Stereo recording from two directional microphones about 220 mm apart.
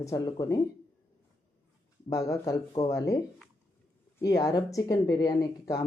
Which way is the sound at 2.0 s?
15° left (ahead or behind).